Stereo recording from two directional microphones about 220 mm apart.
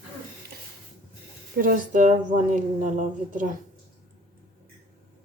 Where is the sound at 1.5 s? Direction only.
40° right (ahead or behind).